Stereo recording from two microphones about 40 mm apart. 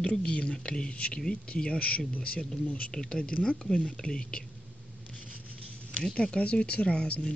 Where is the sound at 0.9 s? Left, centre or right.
Left.